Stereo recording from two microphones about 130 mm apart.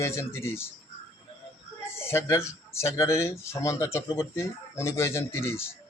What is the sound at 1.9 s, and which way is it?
Speech, 20° left (ahead or behind).